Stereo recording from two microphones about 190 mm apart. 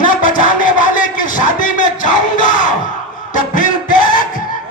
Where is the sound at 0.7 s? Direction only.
45° left (ahead or behind).